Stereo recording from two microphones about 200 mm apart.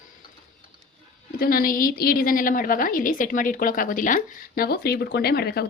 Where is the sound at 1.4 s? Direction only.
45° left (ahead or behind).